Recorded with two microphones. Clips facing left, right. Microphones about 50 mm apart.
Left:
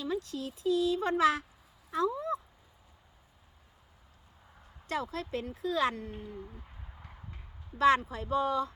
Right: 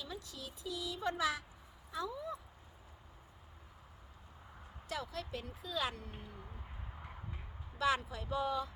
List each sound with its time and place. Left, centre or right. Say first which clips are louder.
0.0 s speech: left 12 dB; left
4.9 s speech: left 7 dB; left
5.9 s speech: left 8 dB; left
6.4 s owl: left 3 dB; centre
7.8 s speech: left 9 dB; left